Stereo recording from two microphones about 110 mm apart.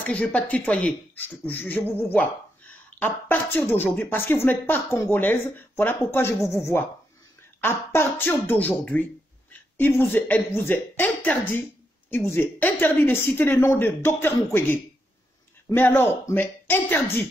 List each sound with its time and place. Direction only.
0.0 s speech: 10° left (ahead or behind)